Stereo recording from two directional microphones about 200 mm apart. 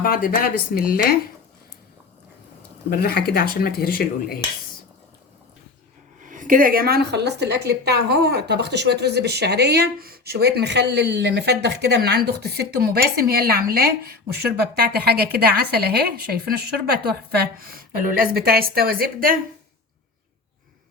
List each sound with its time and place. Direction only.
0.0 s speech: 45° left (ahead or behind)
2.9 s speech: 50° left (ahead or behind)
6.2 s a woman's voice: 40° right (ahead or behind)